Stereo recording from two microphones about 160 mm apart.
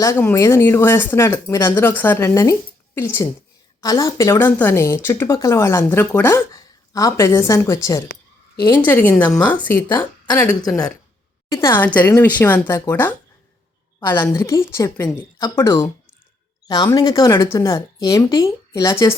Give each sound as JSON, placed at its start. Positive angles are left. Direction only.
{"t": 0.0, "sound": "speech", "side_deg": 15}
{"t": 11.5, "sound": "speech", "side_deg": 15}